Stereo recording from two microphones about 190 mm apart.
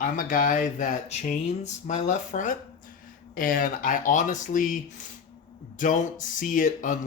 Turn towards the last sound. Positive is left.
turn(degrees=45)  # may be behind; listen again after turning